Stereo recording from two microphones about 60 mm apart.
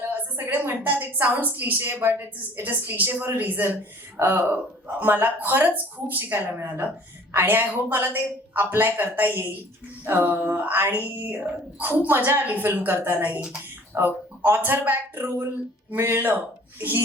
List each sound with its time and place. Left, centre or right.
0.0 s a woman's voice: right